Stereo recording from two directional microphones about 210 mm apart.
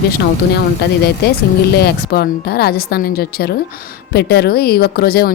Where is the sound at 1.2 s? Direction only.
50° left (ahead or behind).